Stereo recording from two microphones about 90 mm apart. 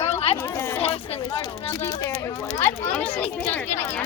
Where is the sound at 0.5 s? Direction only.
25° left (ahead or behind).